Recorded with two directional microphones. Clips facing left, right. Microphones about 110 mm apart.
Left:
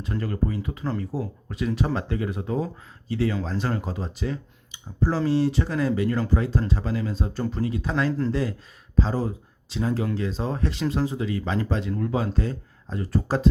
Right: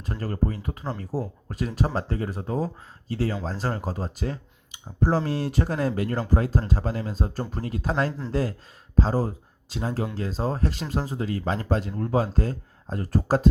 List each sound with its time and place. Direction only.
0.0 s speech: 40° right (ahead or behind)